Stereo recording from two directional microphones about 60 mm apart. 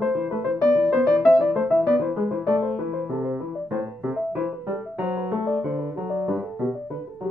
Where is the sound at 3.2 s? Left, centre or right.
Right.